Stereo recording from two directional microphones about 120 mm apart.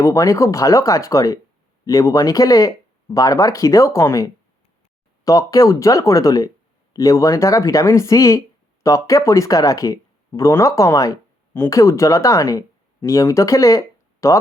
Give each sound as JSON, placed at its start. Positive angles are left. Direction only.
{"t": 0.0, "sound": "speech", "side_deg": 25}